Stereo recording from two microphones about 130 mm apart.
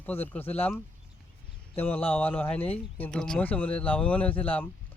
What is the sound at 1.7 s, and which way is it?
Speech, 15° left (ahead or behind).